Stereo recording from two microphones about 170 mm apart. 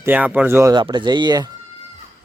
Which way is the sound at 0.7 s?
25° right (ahead or behind).